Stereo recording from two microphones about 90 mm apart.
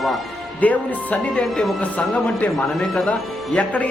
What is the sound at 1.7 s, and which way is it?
Speech, 15° left (ahead or behind).